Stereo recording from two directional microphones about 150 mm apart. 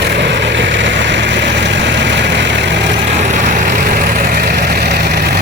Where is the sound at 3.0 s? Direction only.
50° right (ahead or behind); by 5.4 s 90° right.